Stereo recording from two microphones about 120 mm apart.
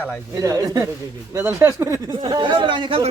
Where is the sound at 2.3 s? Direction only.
40° right (ahead or behind).